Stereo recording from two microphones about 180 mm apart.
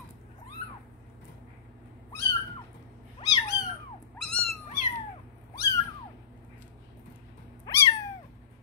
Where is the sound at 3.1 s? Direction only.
20° left (ahead or behind).